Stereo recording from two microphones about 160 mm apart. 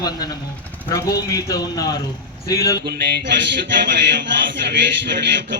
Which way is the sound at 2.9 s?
90° right.